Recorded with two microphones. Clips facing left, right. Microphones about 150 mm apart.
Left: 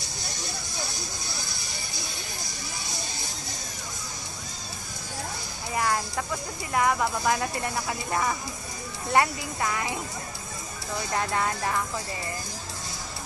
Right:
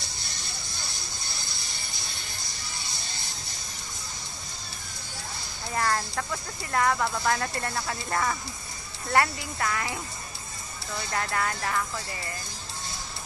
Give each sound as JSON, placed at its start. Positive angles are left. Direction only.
{"t": 1.3, "sound": "a sound", "side_deg": -25}
{"t": 5.8, "sound": "speech", "side_deg": 15}
{"t": 11.1, "sound": "speech", "side_deg": 20}